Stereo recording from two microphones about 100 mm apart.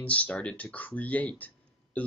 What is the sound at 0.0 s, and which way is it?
Speech, 15° left (ahead or behind).